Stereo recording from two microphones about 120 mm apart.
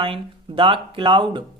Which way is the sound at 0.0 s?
45° right (ahead or behind).